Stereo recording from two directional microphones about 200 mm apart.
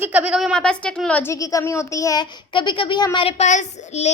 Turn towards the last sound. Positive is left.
turn(degrees=35)  # may be behind; listen again after turning